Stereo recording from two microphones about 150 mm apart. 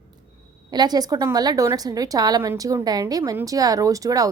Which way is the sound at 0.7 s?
25° right (ahead or behind).